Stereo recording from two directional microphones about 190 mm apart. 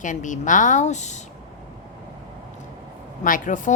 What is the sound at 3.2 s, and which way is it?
Speech, 45° left (ahead or behind).